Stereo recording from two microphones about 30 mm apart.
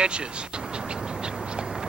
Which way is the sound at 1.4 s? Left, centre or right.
Right.